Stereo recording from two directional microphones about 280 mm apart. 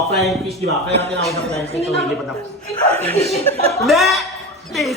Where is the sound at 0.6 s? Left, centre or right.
Right.